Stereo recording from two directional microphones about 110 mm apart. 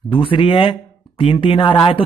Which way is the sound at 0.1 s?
50° left (ahead or behind).